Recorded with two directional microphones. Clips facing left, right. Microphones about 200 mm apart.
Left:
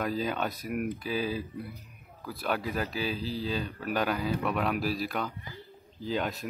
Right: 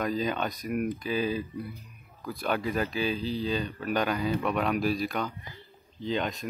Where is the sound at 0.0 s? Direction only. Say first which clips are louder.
Right 1 dB; 5° left (ahead or behind).